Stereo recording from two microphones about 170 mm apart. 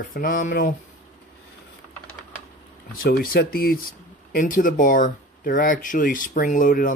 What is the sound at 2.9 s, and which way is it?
Speech, 65° left (ahead or behind).